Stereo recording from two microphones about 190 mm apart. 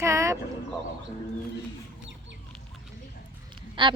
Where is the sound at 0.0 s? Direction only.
15° right (ahead or behind).